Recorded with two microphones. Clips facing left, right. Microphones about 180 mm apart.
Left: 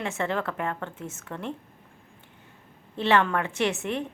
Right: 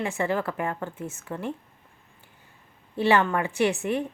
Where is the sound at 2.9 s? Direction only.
5° right (ahead or behind).